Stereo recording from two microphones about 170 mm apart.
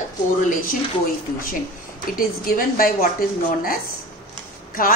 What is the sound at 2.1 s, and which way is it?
Speech, 55° left (ahead or behind).